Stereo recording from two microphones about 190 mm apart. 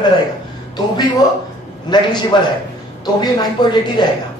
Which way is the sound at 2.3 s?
25° left (ahead or behind).